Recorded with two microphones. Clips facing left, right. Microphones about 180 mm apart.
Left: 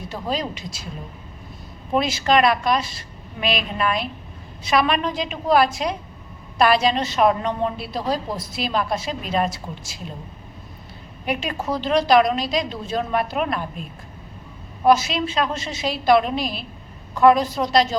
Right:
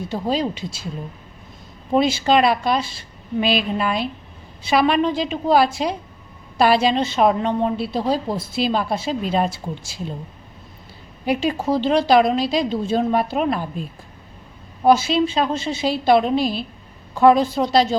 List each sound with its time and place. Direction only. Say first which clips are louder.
0.1 s a woman's voice: right 4 dB; 30° right (ahead or behind)
1.9 s a woman's voice: right 3 dB; 25° right (ahead or behind)
11.3 s a woman's voice: right 5 dB; 30° right (ahead or behind)
14.8 s a woman's voice: right 2 dB; 30° right (ahead or behind)